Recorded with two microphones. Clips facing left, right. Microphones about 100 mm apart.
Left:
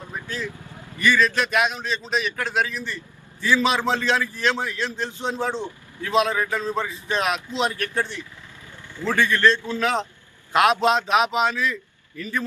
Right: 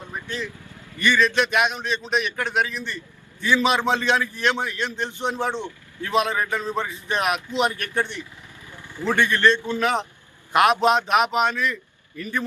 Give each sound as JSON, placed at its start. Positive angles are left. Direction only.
{"t": 1.0, "sound": "a man's voice", "side_deg": 5}
{"t": 3.5, "sound": "a man's voice", "side_deg": -10}
{"t": 4.9, "sound": "a man's voice", "side_deg": -15}
{"t": 8.9, "sound": "vehicle", "side_deg": -15}
{"t": 9.3, "sound": "a man's voice", "side_deg": -15}